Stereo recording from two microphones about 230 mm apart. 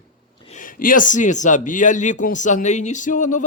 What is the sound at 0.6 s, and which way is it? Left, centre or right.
A man's voice, left.